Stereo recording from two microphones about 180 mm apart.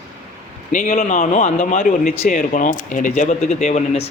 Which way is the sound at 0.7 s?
45° left (ahead or behind).